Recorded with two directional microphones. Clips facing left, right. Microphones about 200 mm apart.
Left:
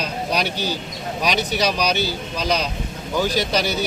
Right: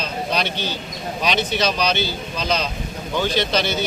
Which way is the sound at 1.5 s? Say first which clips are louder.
Even; 10° left (ahead or behind).